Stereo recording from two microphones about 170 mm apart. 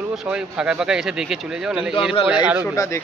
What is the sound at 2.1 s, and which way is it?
Speech, 30° left (ahead or behind).